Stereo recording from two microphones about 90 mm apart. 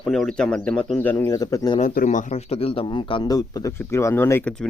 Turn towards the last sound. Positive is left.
turn(degrees=30)  # may be behind; listen again after turning